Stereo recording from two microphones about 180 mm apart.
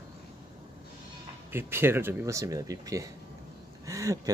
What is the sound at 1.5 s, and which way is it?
Speech, 10° right (ahead or behind).